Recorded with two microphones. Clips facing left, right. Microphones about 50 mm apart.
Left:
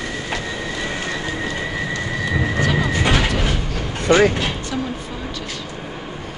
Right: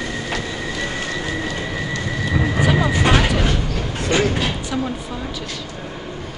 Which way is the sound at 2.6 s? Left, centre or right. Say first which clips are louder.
Right 3 dB; centre.